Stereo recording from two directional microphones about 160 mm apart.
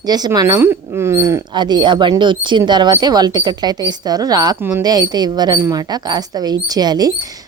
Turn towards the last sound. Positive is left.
turn(degrees=-25)  # may be behind; listen again after turning